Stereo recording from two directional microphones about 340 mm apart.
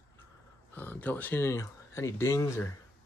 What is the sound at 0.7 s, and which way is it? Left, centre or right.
Speech, centre.